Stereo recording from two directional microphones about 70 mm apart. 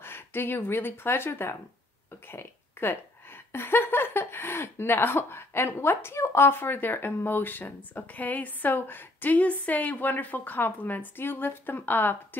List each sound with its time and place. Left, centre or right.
0.0 s speech: left